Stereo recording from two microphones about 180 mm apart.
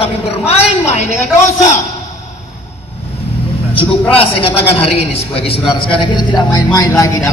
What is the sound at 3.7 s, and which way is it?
A man's voice, 30° left (ahead or behind).